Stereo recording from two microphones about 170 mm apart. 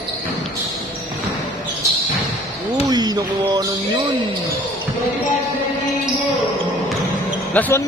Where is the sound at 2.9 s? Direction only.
25° right (ahead or behind).